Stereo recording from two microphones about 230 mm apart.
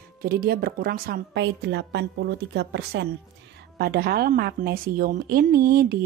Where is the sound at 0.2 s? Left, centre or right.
Right.